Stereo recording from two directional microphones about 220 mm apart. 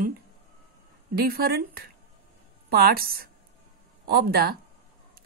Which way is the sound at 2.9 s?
45° right (ahead or behind).